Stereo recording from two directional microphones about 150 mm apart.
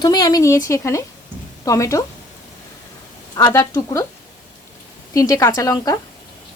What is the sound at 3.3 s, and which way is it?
Speech, 25° left (ahead or behind).